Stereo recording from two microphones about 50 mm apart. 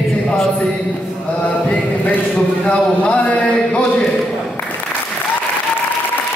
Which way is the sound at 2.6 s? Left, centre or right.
Left.